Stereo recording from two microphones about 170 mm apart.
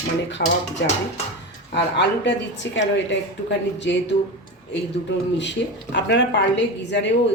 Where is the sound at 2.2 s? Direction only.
90° left.